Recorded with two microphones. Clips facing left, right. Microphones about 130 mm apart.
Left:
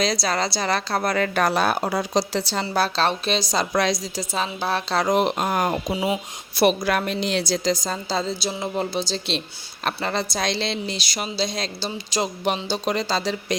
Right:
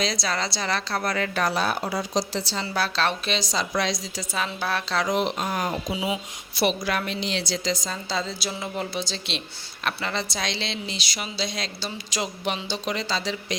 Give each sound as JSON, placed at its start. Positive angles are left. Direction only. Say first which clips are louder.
{"t": 0.0, "sound": "speech", "louder": "left 4 dB", "side_deg": 40}
{"t": 1.4, "sound": "a woman's voice", "louder": "left 4 dB", "side_deg": 55}
{"t": 2.7, "sound": "speech", "louder": "left 3 dB", "side_deg": 35}
{"t": 4.2, "sound": "a woman's voice", "louder": "left 3 dB", "side_deg": 30}
{"t": 8.4, "sound": "speech", "louder": "left 4 dB", "side_deg": 30}